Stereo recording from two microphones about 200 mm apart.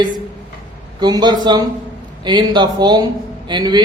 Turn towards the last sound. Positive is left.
turn(degrees=-20)  # may be behind; listen again after turning